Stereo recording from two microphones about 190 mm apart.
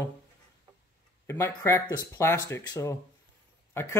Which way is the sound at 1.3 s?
15° left (ahead or behind).